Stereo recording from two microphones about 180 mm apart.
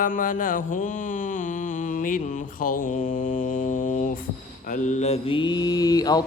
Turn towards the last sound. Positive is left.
turn(degrees=20)  # may be behind; listen again after turning